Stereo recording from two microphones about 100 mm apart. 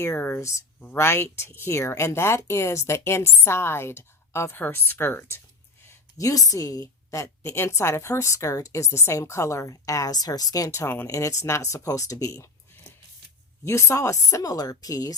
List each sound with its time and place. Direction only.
0.0 s speech: 20° left (ahead or behind)
5.9 s a woman's voice: 35° left (ahead or behind)
13.7 s a woman's voice: 25° left (ahead or behind)